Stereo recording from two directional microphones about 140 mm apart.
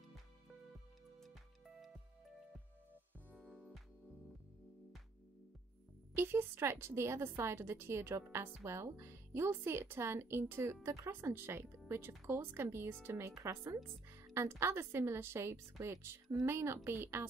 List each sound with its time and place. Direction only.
1.2 s music: centre (ahead or behind)
3.3 s music: centre (ahead or behind)
6.1 s a woman's voice: 15° right (ahead or behind)